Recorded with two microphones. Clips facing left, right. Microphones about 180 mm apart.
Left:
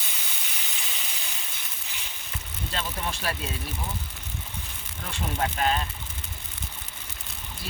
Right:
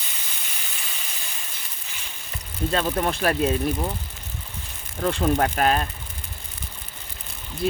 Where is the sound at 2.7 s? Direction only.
50° right (ahead or behind).